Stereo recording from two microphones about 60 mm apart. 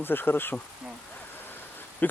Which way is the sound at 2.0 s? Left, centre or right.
Left.